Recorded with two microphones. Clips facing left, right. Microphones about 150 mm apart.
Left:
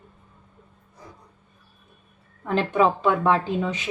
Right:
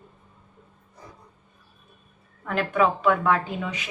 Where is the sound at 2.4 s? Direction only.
30° left (ahead or behind).